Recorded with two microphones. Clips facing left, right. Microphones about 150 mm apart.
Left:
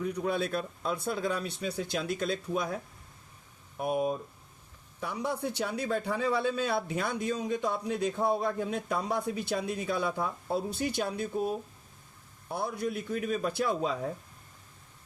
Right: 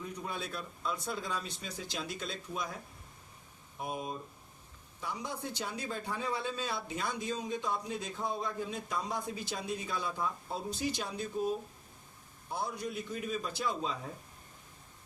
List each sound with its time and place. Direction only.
0.0 s a man's voice: 70° left (ahead or behind)
3.8 s a man's voice: 55° left (ahead or behind)
12.5 s a man's voice: 60° left (ahead or behind)